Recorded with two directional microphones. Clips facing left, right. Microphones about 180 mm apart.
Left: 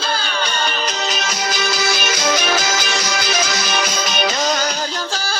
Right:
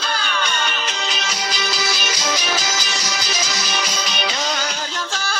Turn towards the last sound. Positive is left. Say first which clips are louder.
# left 3 dB
turn(degrees=35)  # may be behind; listen again after turning